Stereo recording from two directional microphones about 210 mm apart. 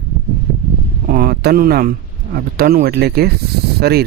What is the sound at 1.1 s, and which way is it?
Speech, 45° right (ahead or behind).